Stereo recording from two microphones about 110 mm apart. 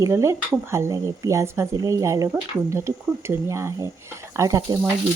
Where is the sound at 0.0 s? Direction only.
25° right (ahead or behind).